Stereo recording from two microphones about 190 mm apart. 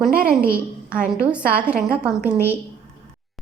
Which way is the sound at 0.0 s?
5° right (ahead or behind).